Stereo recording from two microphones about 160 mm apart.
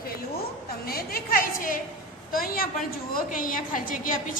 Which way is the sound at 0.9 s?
70° left (ahead or behind).